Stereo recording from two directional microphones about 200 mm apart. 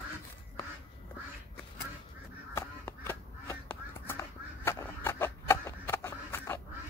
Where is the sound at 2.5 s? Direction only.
15° left (ahead or behind).